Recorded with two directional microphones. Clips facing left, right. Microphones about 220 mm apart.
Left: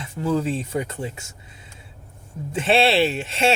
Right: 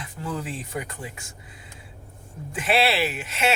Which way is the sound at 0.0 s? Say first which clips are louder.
Left 9 dB; 25° left (ahead or behind).